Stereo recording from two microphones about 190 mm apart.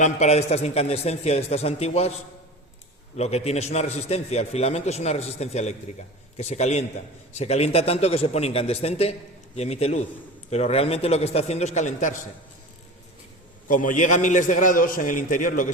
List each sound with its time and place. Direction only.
0.0 s a man's voice: 35° left (ahead or behind)
3.2 s a man's voice: 35° left (ahead or behind)
13.7 s a man's voice: 45° left (ahead or behind)